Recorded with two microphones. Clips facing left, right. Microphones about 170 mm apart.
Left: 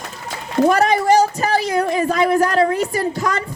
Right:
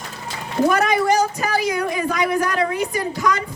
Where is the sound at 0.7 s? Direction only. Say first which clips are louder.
Left 3 dB; 35° left (ahead or behind).